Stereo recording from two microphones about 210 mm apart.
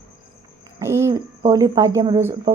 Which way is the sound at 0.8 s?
15° right (ahead or behind).